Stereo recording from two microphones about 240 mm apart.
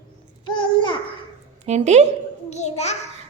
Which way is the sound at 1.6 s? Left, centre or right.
Right.